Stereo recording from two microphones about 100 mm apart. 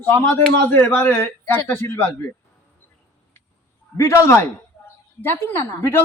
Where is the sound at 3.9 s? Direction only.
30° left (ahead or behind).